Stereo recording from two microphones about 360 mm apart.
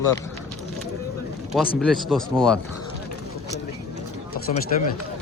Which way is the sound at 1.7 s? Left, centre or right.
Centre.